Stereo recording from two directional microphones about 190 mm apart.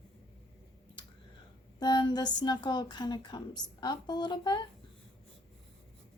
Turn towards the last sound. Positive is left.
turn(degrees=25)  # may be behind; listen again after turning